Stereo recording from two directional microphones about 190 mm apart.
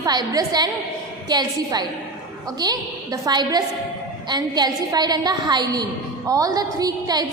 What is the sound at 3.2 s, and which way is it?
A woman's voice, 20° right (ahead or behind).